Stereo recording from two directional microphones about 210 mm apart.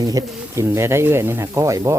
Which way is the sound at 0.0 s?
15° right (ahead or behind).